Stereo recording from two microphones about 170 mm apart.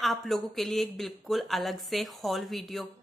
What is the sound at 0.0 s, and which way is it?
A woman's voice, centre (ahead or behind).